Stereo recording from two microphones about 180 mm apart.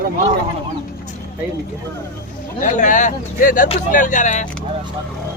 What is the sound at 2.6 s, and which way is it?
Speech, 45° left (ahead or behind).